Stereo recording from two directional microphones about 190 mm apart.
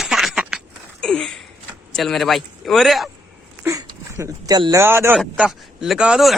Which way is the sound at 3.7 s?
15° right (ahead or behind).